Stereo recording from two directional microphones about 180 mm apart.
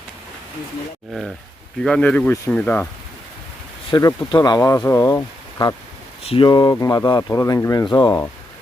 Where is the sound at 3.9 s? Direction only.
25° left (ahead or behind).